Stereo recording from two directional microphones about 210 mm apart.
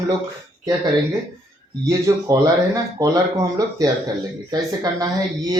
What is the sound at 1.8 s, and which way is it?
Speech, 15° right (ahead or behind).